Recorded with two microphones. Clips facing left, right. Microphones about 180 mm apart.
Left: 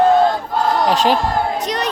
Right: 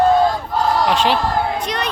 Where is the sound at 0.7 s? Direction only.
40° left (ahead or behind).